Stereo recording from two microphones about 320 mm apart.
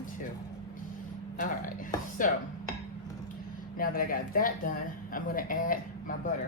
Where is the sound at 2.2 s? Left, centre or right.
Left.